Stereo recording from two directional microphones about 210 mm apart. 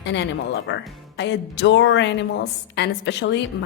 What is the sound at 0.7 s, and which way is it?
Speech, 55° left (ahead or behind).